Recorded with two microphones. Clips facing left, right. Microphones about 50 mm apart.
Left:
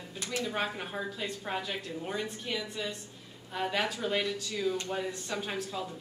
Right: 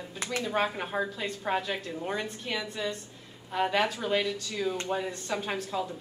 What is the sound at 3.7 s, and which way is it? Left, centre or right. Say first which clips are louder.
Speech: right 2 dB; centre.